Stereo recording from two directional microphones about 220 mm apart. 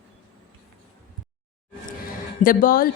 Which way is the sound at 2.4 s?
40° left (ahead or behind).